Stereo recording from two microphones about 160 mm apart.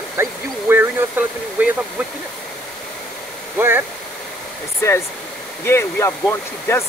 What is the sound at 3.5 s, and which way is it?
Speech, 15° right (ahead or behind).